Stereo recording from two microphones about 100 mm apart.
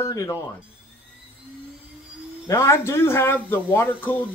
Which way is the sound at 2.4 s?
30° left (ahead or behind).